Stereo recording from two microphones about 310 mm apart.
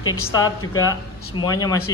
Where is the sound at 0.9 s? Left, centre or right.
Centre.